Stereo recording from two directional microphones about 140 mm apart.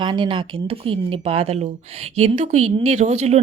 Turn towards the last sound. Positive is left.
turn(degrees=-50)  # may be behind; listen again after turning